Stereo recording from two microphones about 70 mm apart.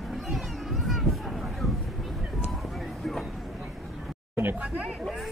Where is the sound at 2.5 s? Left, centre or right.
Centre.